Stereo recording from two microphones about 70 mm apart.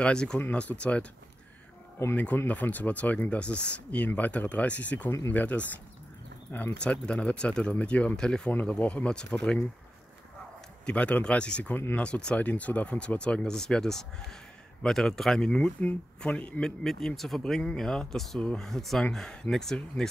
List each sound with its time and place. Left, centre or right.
0.0 s speech: centre
2.1 s speech: left
6.8 s speech: centre
10.9 s speech: centre
11.7 s speech: left
12.0 s speech: centre
16.8 s speech: centre
17.4 s speech: centre